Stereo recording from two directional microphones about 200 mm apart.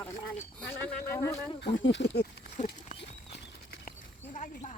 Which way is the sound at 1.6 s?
60° left (ahead or behind).